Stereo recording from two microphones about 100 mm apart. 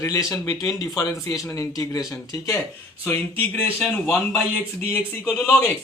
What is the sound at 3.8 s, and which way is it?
Speech, 15° left (ahead or behind).